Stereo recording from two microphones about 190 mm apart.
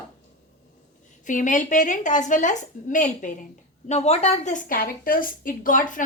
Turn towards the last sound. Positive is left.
turn(degrees=45)  # may be behind; listen again after turning